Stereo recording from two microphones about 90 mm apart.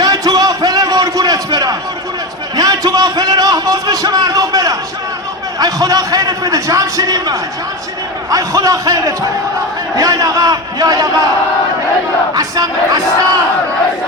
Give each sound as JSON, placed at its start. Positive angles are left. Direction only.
{"t": 0.0, "sound": "a sound", "side_deg": -45}
{"t": 8.3, "sound": "a man's voice", "side_deg": -40}
{"t": 12.3, "sound": "crowd", "side_deg": -45}